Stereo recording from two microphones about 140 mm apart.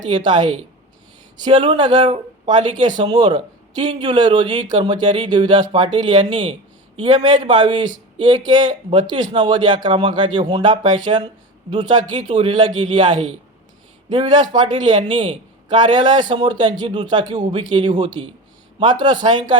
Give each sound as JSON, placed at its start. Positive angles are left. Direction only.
{"t": 0.1, "sound": "a man's voice", "side_deg": -30}